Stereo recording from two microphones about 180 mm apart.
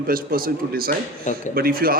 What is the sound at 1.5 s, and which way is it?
Speech, 55° right (ahead or behind).